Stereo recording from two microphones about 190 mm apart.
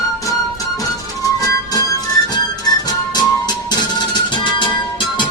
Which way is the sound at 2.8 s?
20° left (ahead or behind).